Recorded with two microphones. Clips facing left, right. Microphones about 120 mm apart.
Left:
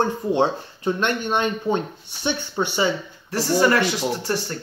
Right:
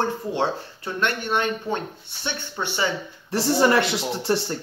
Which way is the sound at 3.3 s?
25° right (ahead or behind).